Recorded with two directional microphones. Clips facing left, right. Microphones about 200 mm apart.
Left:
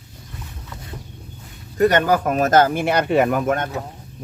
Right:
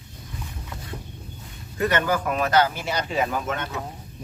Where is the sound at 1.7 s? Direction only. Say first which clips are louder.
Left 7 dB; 40° left (ahead or behind).